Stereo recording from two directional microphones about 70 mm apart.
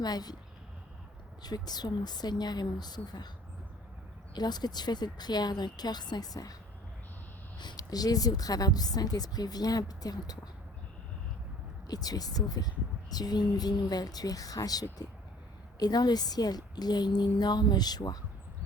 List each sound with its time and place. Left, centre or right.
0.0 s a woman's voice: left
1.4 s a woman's voice: left
4.4 s speech: left
7.6 s a woman's voice: left
11.9 s a woman's voice: left
15.8 s a woman's voice: left